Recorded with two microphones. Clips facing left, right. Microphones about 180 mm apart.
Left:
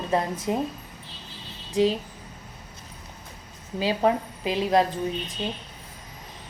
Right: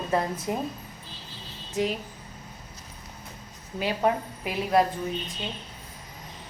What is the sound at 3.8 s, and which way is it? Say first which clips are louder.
A woman's voice: left 2 dB; 25° left (ahead or behind).